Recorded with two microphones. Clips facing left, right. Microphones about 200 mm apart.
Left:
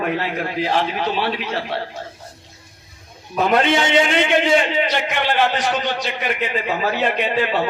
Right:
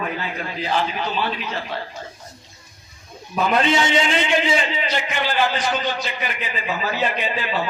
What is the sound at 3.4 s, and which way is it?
A man's voice, 60° left (ahead or behind).